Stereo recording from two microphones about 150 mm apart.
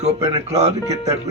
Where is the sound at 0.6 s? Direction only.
45° right (ahead or behind).